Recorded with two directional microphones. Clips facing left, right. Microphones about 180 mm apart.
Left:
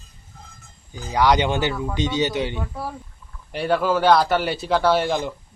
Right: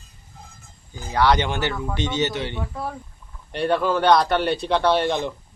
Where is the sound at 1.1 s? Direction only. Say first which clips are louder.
Left 1 dB; 15° left (ahead or behind).